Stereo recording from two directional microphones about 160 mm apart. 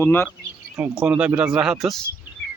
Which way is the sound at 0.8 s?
10° right (ahead or behind).